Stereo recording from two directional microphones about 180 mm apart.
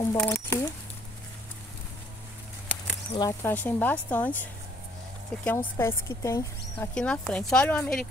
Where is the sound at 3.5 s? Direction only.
10° left (ahead or behind).